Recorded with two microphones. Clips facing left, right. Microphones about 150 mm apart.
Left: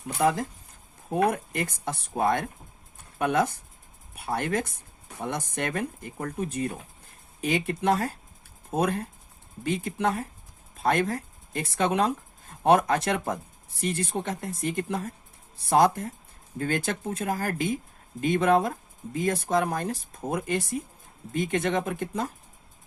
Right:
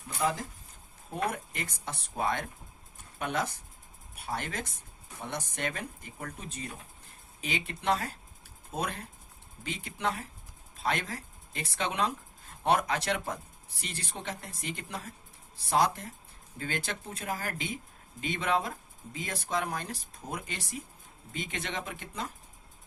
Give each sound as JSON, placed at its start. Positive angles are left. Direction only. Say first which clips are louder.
{"t": 0.1, "sound": "speech", "louder": "left 7 dB", "side_deg": 60}